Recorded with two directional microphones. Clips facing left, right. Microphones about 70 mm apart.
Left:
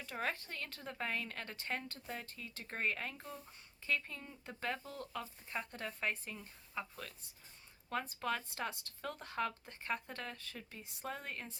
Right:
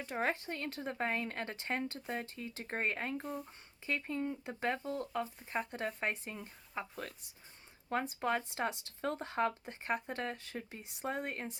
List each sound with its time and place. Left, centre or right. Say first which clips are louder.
0.0 s speech: right 5 dB; right
7.9 s speech: right 4 dB; right